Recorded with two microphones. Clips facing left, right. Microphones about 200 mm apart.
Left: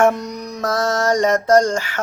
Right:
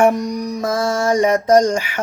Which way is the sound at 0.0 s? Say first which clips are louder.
Right 2 dB; 15° right (ahead or behind).